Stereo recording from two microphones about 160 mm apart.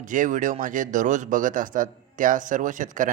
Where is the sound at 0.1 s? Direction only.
55° right (ahead or behind).